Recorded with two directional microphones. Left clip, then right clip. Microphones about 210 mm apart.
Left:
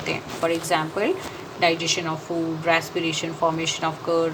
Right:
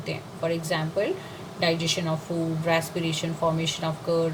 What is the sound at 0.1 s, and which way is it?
Speech, 10° left (ahead or behind).